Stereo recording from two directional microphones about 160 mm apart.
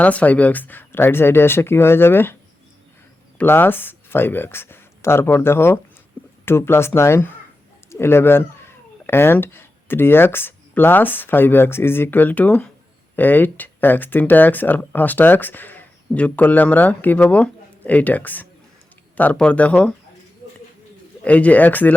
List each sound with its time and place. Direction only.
0.0 s speech: 10° left (ahead or behind)
3.3 s speech: 15° left (ahead or behind)
21.2 s speech: 10° left (ahead or behind)